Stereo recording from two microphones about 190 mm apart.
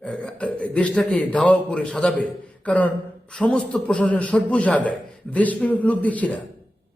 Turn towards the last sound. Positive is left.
turn(degrees=5)  # may be behind; listen again after turning